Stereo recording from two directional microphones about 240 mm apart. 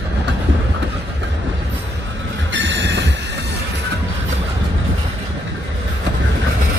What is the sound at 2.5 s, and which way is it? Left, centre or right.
Train, right.